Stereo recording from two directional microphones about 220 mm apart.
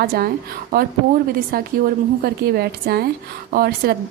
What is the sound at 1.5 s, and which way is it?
Speech, 45° right (ahead or behind).